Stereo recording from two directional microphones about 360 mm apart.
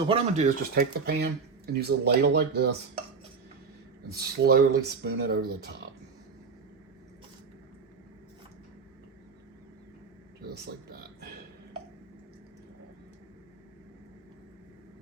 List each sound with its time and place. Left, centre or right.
0.1 s speech: centre
4.1 s speech: right